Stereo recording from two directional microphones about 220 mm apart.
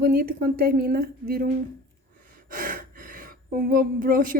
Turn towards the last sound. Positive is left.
turn(degrees=-40)  # may be behind; listen again after turning